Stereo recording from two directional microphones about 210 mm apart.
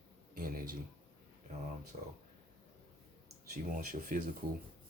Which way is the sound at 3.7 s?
40° right (ahead or behind).